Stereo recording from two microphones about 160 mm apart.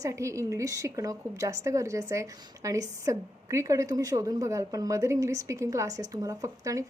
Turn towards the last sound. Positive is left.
turn(degrees=-20)  # may be behind; listen again after turning